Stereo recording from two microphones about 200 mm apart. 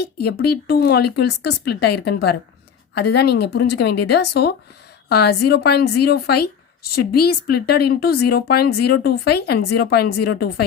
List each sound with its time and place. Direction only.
0.0 s speech: 50° left (ahead or behind)